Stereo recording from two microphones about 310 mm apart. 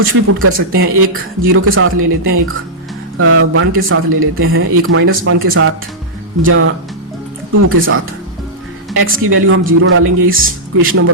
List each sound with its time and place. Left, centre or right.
0.1 s speech: right
9.1 s speech: right